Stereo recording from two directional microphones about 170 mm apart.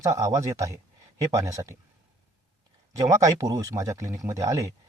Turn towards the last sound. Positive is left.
turn(degrees=-20)  # may be behind; listen again after turning